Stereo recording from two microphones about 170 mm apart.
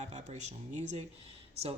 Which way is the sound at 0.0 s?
40° right (ahead or behind).